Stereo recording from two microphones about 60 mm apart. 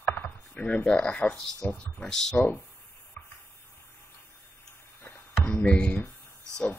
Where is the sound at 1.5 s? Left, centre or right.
Centre.